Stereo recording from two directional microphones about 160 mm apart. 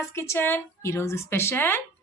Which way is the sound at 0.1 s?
15° left (ahead or behind).